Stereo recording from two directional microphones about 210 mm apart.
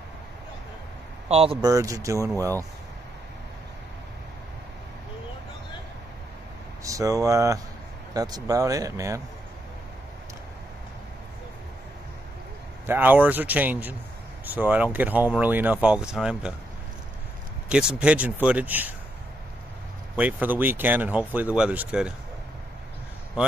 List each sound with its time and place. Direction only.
1.3 s speech: 25° right (ahead or behind)
6.8 s speech: 15° right (ahead or behind)
12.8 s speech: 10° right (ahead or behind)
17.6 s speech: 5° right (ahead or behind)
20.2 s speech: 5° right (ahead or behind)